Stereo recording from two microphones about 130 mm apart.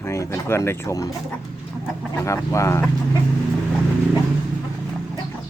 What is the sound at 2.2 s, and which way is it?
Speech, 25° left (ahead or behind).